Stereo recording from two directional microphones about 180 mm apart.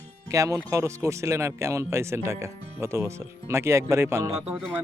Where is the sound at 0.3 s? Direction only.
15° right (ahead or behind).